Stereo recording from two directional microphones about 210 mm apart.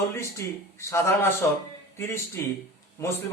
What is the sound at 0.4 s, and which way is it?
Speech, 15° left (ahead or behind).